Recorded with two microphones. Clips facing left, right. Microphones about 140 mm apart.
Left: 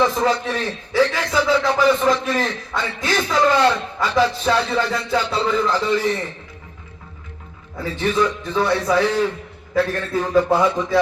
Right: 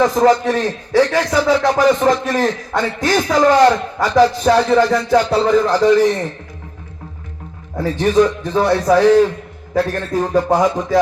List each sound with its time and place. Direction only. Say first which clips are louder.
0.0 s a man's voice: right 6 dB; 45° right (ahead or behind)
7.8 s a man's voice: right 6 dB; 40° right (ahead or behind)